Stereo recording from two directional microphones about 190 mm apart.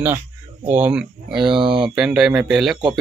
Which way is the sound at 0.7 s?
10° right (ahead or behind).